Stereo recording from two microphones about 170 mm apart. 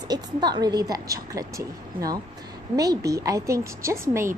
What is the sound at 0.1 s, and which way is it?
A woman's voice, 25° right (ahead or behind).